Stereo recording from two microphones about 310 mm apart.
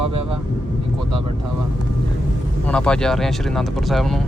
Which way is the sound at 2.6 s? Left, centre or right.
Centre.